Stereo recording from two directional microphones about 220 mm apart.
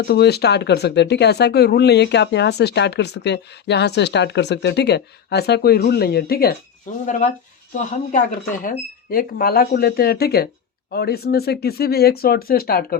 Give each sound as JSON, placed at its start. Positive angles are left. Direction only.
{"t": 0.0, "sound": "speech", "side_deg": 45}